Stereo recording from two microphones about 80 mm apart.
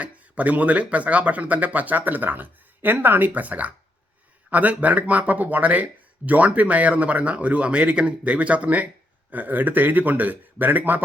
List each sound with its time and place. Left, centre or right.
0.0 s speech: centre